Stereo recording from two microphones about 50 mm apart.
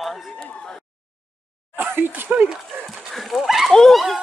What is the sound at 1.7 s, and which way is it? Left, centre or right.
Speech, right.